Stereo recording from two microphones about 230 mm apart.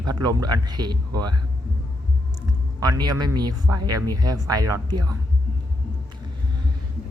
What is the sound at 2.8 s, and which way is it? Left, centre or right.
Speech, centre.